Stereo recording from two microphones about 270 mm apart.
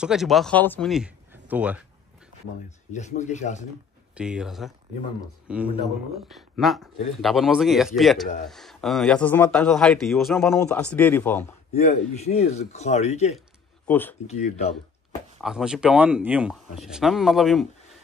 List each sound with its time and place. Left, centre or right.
0.0 s speech: centre
2.9 s speech: left
4.1 s speech: centre
11.7 s speech: left
13.8 s speech: centre
14.2 s speech: left
15.4 s speech: centre